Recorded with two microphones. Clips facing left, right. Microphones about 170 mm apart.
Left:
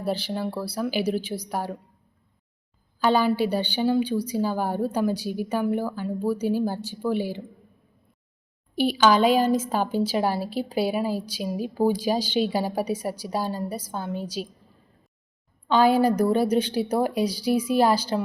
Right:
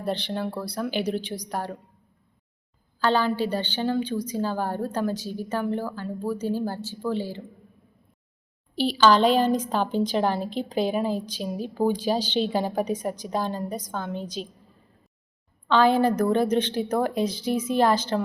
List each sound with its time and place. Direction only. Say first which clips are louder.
0.0 s a woman's voice: left 1 dB; 5° left (ahead or behind)
3.0 s a woman's voice: left 2 dB; 10° left (ahead or behind)
8.8 s a woman's voice: even; 10° left (ahead or behind)
15.6 s a woman's voice: left 1 dB; 15° left (ahead or behind)